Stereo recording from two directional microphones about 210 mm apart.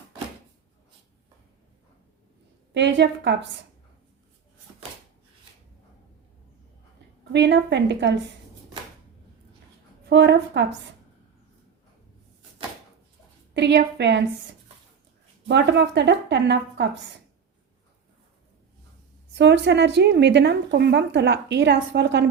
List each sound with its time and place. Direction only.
2.7 s a woman's voice: 55° right (ahead or behind)
7.3 s a woman's voice: 55° right (ahead or behind)
10.1 s a woman's voice: 55° right (ahead or behind)
13.5 s a woman's voice: 55° right (ahead or behind)
15.4 s a woman's voice: 55° right (ahead or behind)
19.3 s a woman's voice: 55° right (ahead or behind)